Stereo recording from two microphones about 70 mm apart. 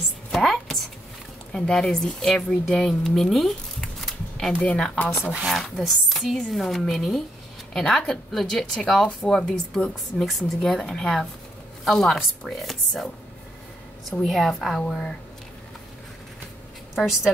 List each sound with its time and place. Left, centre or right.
0.3 s a sound: centre
1.5 s speech: centre
4.6 s speech: centre
5.5 s a woman's voice: centre
14.2 s speech: centre
16.9 s speech: centre